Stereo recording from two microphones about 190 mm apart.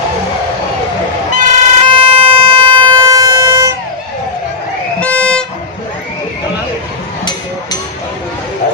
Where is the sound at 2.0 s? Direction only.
30° right (ahead or behind).